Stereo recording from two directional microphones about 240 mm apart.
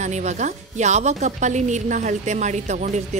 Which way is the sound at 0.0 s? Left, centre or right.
Right.